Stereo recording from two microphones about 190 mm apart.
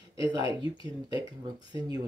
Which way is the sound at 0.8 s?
20° right (ahead or behind).